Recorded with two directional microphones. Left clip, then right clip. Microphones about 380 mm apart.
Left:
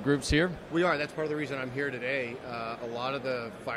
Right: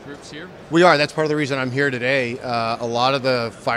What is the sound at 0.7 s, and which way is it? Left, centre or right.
A man's voice, right.